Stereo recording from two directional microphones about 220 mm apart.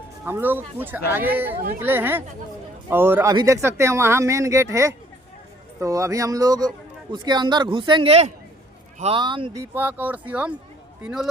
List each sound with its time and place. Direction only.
0.3 s a man's voice: 10° right (ahead or behind)